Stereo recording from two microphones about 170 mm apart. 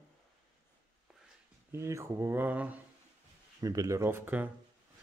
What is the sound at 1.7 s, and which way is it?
Speech, 15° right (ahead or behind).